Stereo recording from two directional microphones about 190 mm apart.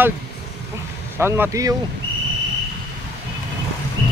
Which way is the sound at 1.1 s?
10° right (ahead or behind).